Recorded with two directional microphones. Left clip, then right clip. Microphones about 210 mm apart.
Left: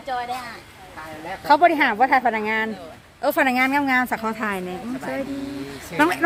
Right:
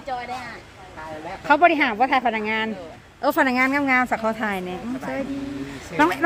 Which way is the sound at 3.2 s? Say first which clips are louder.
Even; 5° right (ahead or behind).